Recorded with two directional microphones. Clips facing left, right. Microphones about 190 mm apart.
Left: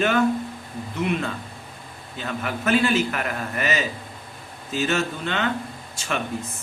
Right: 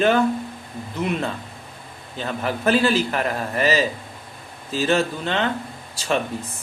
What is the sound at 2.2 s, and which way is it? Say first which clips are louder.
A man's voice: right 4 dB; 35° right (ahead or behind).